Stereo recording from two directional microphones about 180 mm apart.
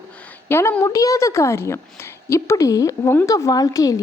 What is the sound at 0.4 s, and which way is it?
A woman's voice, 15° left (ahead or behind).